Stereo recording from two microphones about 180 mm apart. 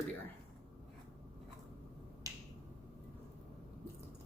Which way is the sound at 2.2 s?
20° right (ahead or behind).